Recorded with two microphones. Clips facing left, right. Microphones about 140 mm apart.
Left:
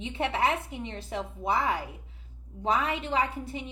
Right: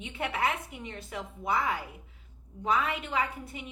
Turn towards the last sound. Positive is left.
turn(degrees=30)  # may be behind; listen again after turning